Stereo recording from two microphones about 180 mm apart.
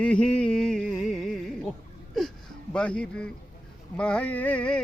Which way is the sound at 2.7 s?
5° left (ahead or behind).